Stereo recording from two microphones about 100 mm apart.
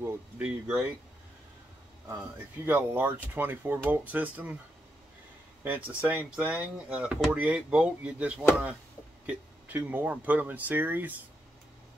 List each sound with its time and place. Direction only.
0.4 s speech: 10° right (ahead or behind)
2.6 s speech: 20° right (ahead or behind)
5.6 s speech: 15° right (ahead or behind)